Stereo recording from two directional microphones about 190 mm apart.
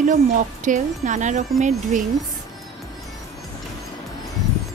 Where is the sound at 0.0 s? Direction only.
40° right (ahead or behind).